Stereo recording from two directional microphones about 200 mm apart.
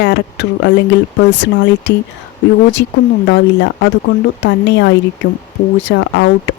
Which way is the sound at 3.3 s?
65° left (ahead or behind).